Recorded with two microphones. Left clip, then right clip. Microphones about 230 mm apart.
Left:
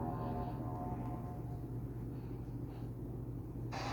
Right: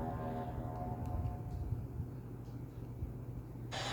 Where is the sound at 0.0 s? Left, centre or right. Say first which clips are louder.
Even; right.